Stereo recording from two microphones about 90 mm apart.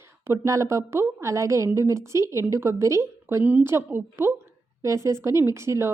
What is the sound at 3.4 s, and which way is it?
A woman's voice, 20° right (ahead or behind).